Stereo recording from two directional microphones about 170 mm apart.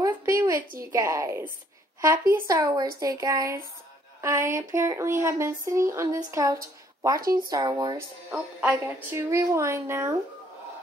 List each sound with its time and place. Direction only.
0.0 s a woman's voice: 20° right (ahead or behind)
8.3 s speech: 10° right (ahead or behind)